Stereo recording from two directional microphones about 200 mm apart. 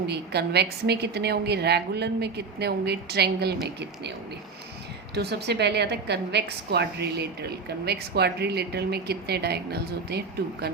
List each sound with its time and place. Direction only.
0.1 s a woman's voice: 55° right (ahead or behind)
5.1 s a woman's voice: 55° right (ahead or behind)